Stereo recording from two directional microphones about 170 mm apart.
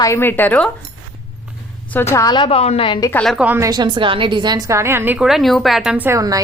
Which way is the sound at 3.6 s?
25° right (ahead or behind).